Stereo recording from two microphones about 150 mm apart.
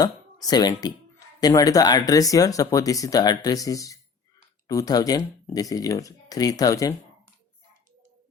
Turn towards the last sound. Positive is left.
turn(degrees=20)  # may be behind; listen again after turning